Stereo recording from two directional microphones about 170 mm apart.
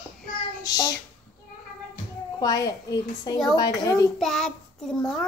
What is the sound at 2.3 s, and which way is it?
A child's voice, 20° left (ahead or behind).